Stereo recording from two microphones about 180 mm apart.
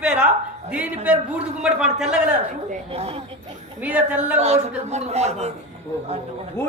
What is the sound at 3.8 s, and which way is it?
Speech, 5° right (ahead or behind).